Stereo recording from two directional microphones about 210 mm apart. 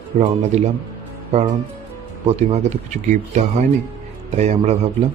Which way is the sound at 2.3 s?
30° right (ahead or behind).